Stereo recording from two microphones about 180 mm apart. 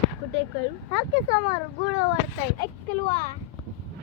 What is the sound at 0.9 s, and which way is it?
Speech, 90° right.